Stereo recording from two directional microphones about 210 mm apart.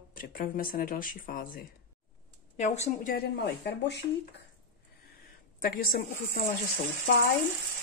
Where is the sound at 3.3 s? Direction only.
55° left (ahead or behind).